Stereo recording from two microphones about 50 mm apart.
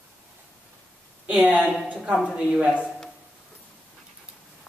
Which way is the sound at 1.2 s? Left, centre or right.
Right.